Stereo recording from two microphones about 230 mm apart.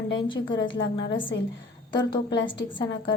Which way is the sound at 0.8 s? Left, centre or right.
Left.